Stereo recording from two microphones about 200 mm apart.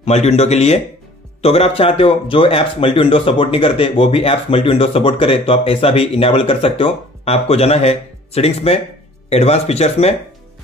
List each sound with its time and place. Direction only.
0.0 s speech: 35° left (ahead or behind)